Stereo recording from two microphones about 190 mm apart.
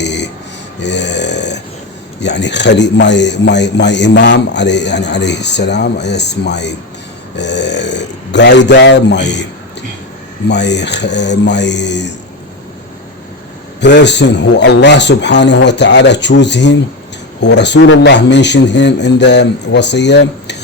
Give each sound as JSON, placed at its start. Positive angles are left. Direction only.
{"t": 0.0, "sound": "a sound", "side_deg": 65}
{"t": 2.2, "sound": "a man's voice", "side_deg": 65}
{"t": 7.3, "sound": "burping", "side_deg": 65}
{"t": 10.5, "sound": "a man's voice", "side_deg": 65}
{"t": 13.8, "sound": "a man's voice", "side_deg": 65}